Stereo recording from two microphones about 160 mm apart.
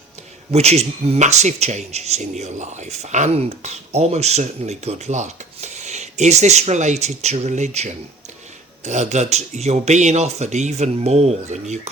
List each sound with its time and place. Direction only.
0.5 s speech: 40° right (ahead or behind)